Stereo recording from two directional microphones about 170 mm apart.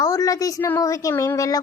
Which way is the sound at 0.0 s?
20° left (ahead or behind).